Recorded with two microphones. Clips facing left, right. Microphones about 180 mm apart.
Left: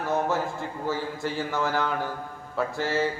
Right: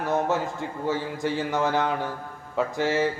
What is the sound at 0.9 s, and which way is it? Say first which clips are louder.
A man's voice: right 3 dB; 20° right (ahead or behind).